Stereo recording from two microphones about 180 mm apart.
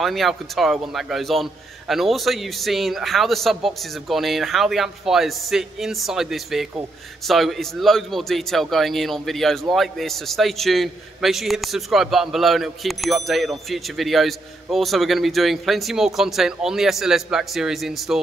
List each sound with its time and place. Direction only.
0.0 s a man's voice: centre (ahead or behind)